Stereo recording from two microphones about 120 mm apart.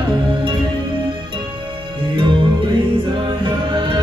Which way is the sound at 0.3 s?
45° right (ahead or behind).